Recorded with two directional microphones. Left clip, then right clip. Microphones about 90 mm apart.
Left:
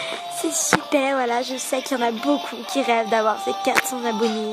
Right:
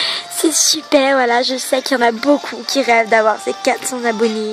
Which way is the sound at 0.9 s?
50° right (ahead or behind).